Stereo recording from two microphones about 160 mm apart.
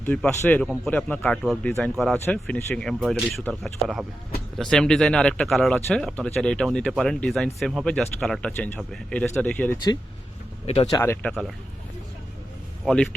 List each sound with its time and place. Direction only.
0.0 s speech: 10° left (ahead or behind)
3.0 s speech: 5° right (ahead or behind)
10.7 s speech: 35° left (ahead or behind)
11.0 s speech: 10° left (ahead or behind)
12.8 s speech: 5° left (ahead or behind)